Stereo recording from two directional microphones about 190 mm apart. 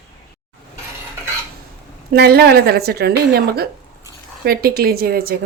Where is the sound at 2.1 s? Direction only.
55° right (ahead or behind).